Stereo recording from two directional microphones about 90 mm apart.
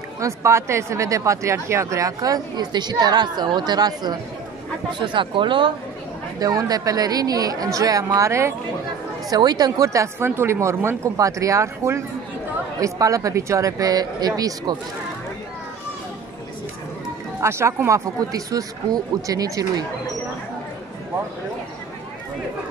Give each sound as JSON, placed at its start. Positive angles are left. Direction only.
{"t": 0.2, "sound": "speech", "side_deg": -30}
{"t": 4.9, "sound": "speech", "side_deg": -65}
{"t": 6.4, "sound": "a woman's voice", "side_deg": -45}
{"t": 9.3, "sound": "speech", "side_deg": -50}
{"t": 17.4, "sound": "speech", "side_deg": -30}